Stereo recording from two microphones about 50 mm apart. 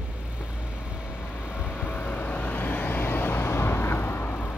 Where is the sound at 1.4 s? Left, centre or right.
Left.